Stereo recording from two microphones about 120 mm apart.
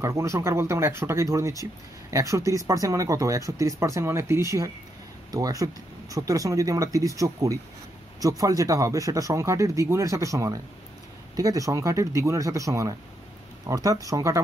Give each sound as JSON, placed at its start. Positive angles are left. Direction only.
{"t": 0.0, "sound": "speech", "side_deg": -25}